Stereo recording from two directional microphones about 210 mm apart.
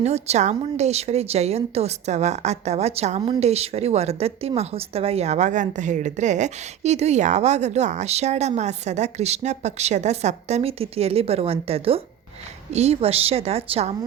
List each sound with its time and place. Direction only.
0.0 s a woman's voice: 30° right (ahead or behind)